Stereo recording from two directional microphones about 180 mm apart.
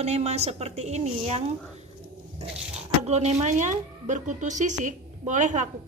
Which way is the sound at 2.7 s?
40° right (ahead or behind).